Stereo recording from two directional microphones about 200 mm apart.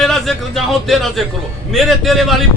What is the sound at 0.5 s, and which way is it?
Speech, centre (ahead or behind).